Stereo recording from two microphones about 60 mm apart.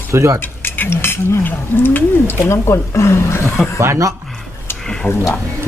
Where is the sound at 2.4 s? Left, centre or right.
Left.